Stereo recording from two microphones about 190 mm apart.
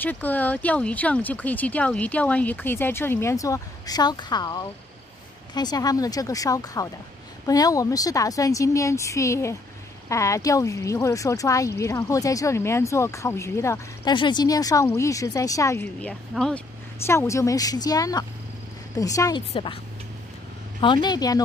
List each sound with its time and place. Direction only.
0.0 s speech: 10° left (ahead or behind); by 19.8 s 25° left (ahead or behind)
20.8 s speech: 25° left (ahead or behind)